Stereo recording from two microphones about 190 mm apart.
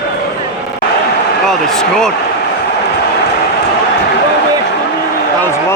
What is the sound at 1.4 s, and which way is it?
Speech, 5° left (ahead or behind).